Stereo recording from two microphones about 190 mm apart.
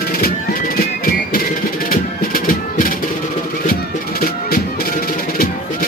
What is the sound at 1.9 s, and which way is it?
Music, 45° left (ahead or behind).